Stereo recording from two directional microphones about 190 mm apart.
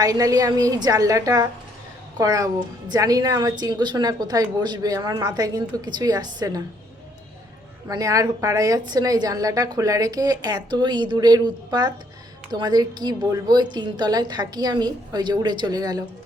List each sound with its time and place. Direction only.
0.0 s a woman's voice: 20° right (ahead or behind)
7.9 s a woman's voice: 20° right (ahead or behind)